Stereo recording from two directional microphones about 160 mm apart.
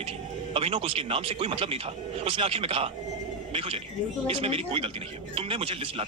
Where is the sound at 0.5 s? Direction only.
35° right (ahead or behind).